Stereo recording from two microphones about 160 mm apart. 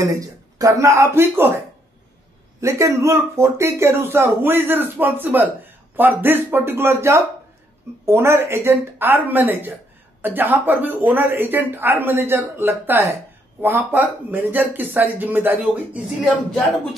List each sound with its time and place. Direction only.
0.0 s speech: 20° right (ahead or behind)
2.6 s speech: 20° right (ahead or behind)